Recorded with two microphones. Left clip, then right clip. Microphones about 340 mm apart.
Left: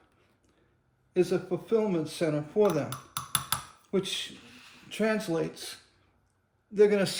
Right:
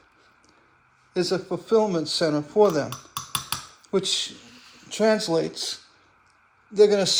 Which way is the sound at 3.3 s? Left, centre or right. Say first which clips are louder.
Right 1 dB; centre.